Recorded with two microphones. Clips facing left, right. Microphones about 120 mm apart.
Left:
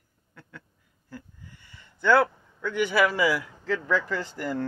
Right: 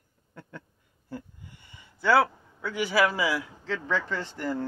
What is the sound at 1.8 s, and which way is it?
A man's voice, 5° right (ahead or behind).